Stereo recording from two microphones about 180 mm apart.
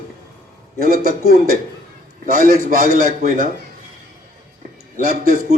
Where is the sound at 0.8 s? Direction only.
55° right (ahead or behind).